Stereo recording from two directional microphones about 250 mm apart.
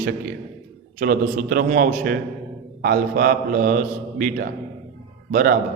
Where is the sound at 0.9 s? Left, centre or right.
Right.